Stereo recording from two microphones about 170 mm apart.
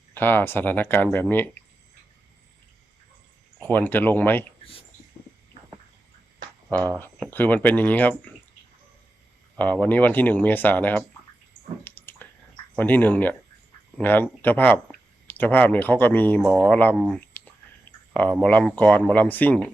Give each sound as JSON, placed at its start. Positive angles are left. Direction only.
{"t": 0.1, "sound": "speech", "side_deg": 10}
{"t": 3.7, "sound": "speech", "side_deg": 10}
{"t": 6.7, "sound": "speech", "side_deg": -20}
{"t": 7.0, "sound": "speech", "side_deg": 10}
{"t": 9.8, "sound": "speech", "side_deg": 10}
{"t": 11.9, "sound": "a sound", "side_deg": 10}
{"t": 12.7, "sound": "speech", "side_deg": 10}